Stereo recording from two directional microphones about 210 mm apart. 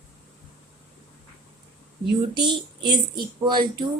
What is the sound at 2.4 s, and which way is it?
A child's voice, 20° right (ahead or behind).